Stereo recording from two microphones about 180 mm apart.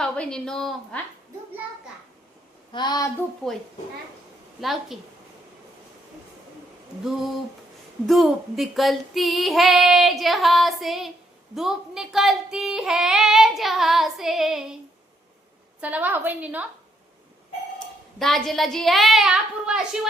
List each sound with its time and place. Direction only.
0.0 s speech: 5° left (ahead or behind)
2.7 s speech: 25° left (ahead or behind)
4.6 s speech: centre (ahead or behind)
7.0 s speech: centre (ahead or behind)
15.8 s a woman's voice: 10° right (ahead or behind)
18.2 s speech: centre (ahead or behind)